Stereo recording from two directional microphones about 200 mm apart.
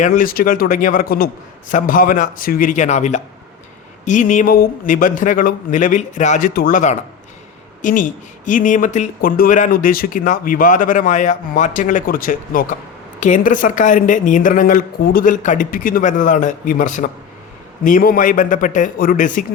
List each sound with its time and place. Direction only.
0.0 s speech: 45° left (ahead or behind)